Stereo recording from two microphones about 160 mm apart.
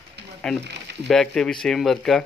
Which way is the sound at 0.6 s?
90° right.